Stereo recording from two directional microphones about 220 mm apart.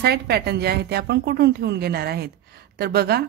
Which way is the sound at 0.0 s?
45° right (ahead or behind).